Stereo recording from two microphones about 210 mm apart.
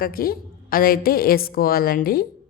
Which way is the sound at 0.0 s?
45° left (ahead or behind).